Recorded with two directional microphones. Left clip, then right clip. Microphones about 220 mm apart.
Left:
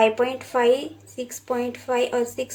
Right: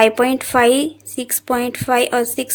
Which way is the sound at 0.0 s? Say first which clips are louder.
Right 6 dB; 55° right (ahead or behind).